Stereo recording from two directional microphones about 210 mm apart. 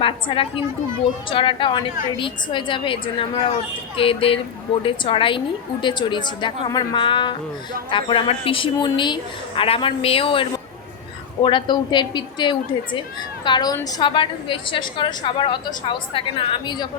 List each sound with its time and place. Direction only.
0.0 s a woman's voice: 25° left (ahead or behind)
11.4 s a woman's voice: 20° left (ahead or behind)